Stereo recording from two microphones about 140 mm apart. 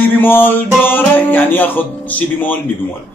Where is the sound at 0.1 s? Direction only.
15° left (ahead or behind).